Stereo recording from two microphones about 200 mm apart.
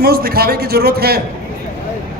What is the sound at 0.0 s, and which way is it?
A man's voice, 50° right (ahead or behind).